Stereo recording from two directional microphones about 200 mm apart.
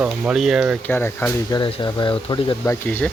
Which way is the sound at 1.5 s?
20° left (ahead or behind).